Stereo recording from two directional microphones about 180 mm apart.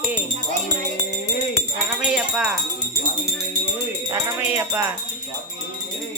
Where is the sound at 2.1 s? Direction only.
5° right (ahead or behind).